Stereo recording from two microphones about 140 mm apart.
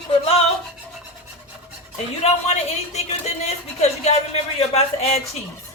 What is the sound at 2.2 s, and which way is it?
Speech, 50° left (ahead or behind).